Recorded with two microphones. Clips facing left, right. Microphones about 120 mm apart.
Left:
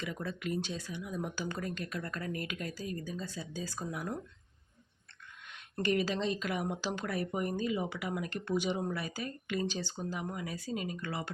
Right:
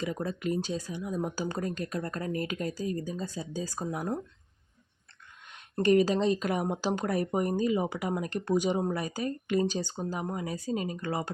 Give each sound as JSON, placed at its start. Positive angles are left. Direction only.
{"t": 0.0, "sound": "speech", "side_deg": -40}
{"t": 5.8, "sound": "speech", "side_deg": -45}